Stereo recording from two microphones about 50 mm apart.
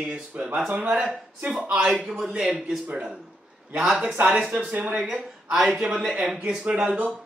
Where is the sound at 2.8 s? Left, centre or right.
Right.